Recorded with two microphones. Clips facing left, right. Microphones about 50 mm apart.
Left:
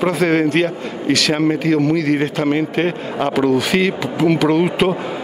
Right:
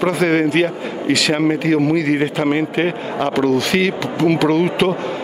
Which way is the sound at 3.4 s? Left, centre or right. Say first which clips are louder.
Left 1 dB; centre.